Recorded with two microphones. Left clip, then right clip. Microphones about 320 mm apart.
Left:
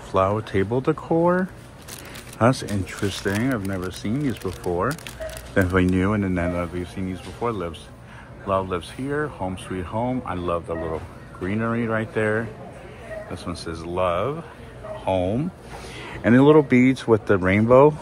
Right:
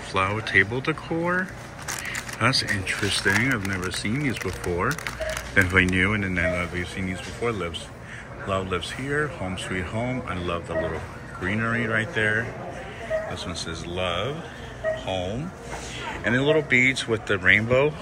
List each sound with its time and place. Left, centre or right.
0.1 s speech: centre
2.4 s speech: centre
13.5 s speech: centre
16.1 s speech: centre